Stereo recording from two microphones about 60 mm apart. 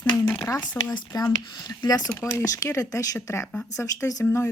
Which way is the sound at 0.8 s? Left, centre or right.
Left.